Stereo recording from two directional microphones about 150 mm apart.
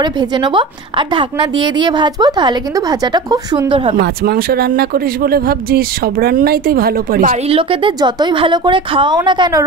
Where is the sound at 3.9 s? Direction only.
85° right.